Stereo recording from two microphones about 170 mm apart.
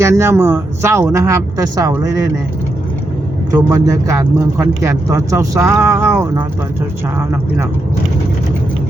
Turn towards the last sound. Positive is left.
turn(degrees=-15)  # may be behind; listen again after turning